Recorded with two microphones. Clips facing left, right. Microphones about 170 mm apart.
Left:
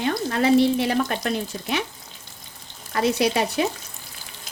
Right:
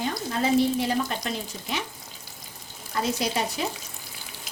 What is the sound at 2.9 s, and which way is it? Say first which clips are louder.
Speech: left 6 dB; 70° left (ahead or behind).